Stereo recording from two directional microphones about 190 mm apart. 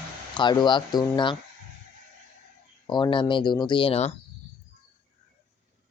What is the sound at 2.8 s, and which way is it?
Speech, 25° left (ahead or behind).